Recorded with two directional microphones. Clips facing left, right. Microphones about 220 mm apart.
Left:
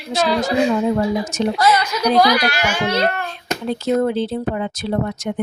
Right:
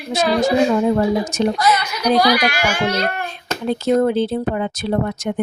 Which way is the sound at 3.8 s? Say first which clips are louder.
Right 2 dB; 50° right (ahead or behind).